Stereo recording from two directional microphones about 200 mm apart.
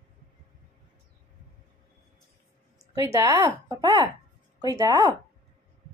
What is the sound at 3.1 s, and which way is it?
Speech, 15° right (ahead or behind).